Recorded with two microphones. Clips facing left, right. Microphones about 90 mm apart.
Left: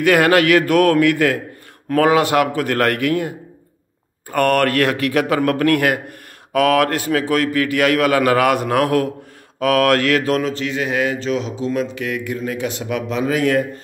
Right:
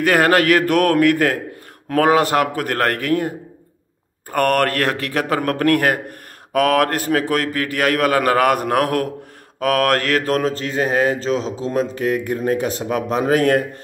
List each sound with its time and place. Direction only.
0.0 s a man's voice: 35° right (ahead or behind)
13.3 s speech: 50° right (ahead or behind)